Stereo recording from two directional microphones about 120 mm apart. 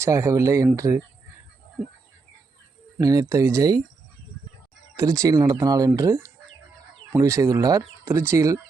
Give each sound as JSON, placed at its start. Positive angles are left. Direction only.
{"t": 0.0, "sound": "speech", "side_deg": -25}
{"t": 3.0, "sound": "speech", "side_deg": -30}
{"t": 4.9, "sound": "speech", "side_deg": -30}